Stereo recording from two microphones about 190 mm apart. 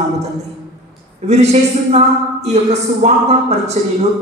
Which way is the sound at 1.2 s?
35° right (ahead or behind).